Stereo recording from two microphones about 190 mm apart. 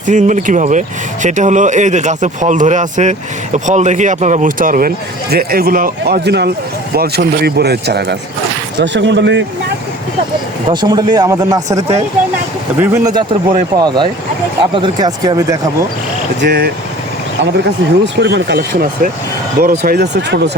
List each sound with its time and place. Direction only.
0.1 s speech: 40° right (ahead or behind); by 9.4 s 70° right (ahead or behind)
10.7 s speech: 20° right (ahead or behind)
16.4 s speech: 50° right (ahead or behind)
18.0 s speech: 65° right (ahead or behind)